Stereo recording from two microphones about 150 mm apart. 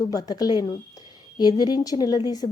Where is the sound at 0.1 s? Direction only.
25° left (ahead or behind).